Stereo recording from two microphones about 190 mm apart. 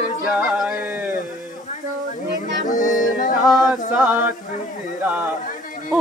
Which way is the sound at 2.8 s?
45° left (ahead or behind).